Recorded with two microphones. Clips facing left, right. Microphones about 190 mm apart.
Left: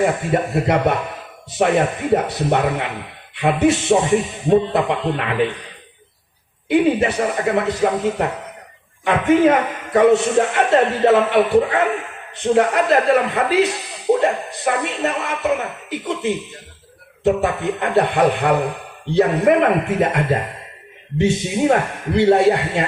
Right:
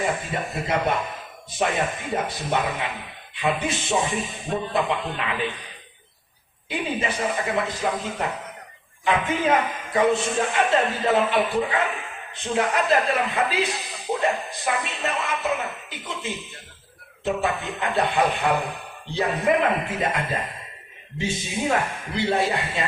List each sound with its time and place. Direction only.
0.0 s speech: 60° left (ahead or behind)
4.4 s a man's voice: 30° left (ahead or behind)
5.1 s speech: 60° left (ahead or behind)
6.7 s speech: 65° left (ahead or behind)
17.6 s speech: 60° left (ahead or behind)